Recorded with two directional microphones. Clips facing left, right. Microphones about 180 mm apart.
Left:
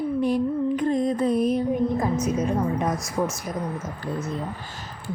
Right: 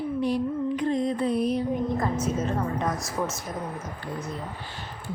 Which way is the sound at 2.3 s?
15° left (ahead or behind).